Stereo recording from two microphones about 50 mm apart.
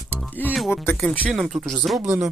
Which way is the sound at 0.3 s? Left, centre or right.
Left.